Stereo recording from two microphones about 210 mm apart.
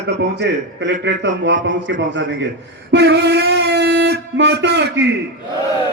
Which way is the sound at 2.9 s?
55° right (ahead or behind).